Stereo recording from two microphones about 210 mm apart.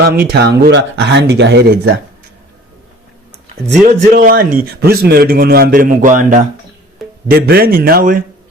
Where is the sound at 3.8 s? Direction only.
40° right (ahead or behind).